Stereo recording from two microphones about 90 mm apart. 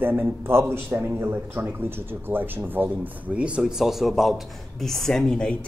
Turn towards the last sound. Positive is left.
turn(degrees=10)  # may be behind; listen again after turning